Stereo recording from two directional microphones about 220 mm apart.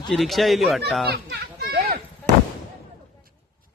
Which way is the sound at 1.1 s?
45° right (ahead or behind).